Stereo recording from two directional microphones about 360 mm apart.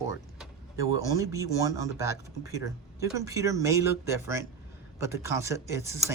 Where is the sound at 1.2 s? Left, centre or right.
Centre.